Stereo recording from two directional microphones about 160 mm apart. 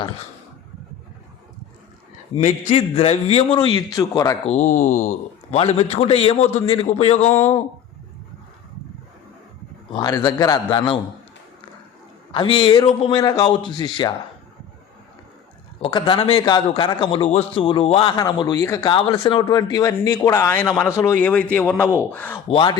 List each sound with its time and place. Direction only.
2.3 s a man's voice: 40° left (ahead or behind)
3.8 s speech: 20° left (ahead or behind)
4.5 s speech: 55° left (ahead or behind)
5.5 s a man's voice: 40° left (ahead or behind)
7.3 s speech: 15° left (ahead or behind)
9.9 s speech: 25° left (ahead or behind)
12.3 s speech: 30° left (ahead or behind)
15.8 s a man's voice: 30° left (ahead or behind); by 22.4 s 10° left (ahead or behind)
22.4 s speech: 30° left (ahead or behind)